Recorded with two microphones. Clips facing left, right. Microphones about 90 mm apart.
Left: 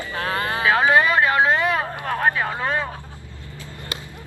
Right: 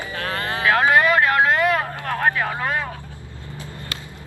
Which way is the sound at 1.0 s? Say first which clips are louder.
Right 1 dB; centre (ahead or behind).